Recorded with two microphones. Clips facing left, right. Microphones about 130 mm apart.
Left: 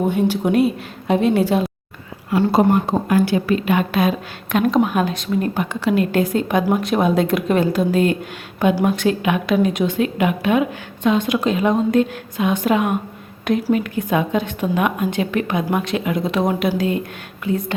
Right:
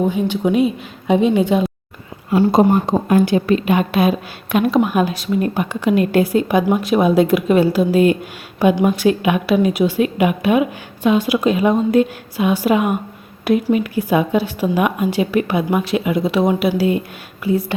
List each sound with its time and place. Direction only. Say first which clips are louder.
0.2 s a woman's voice: even; 5° left (ahead or behind)
2.5 s a woman's voice: right 1 dB; 20° right (ahead or behind)